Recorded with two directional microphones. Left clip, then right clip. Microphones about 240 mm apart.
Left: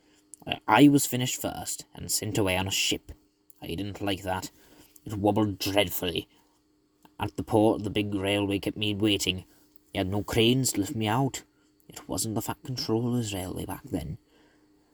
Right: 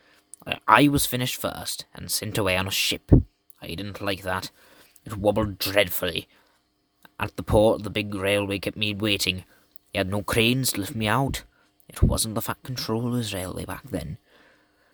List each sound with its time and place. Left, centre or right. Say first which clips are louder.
0.4 s speech: right 3 dB; centre